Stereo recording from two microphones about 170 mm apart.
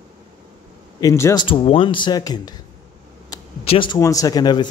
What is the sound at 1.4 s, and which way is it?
Speech, 35° left (ahead or behind).